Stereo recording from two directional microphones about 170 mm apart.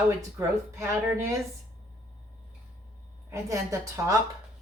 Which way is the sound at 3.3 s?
20° right (ahead or behind).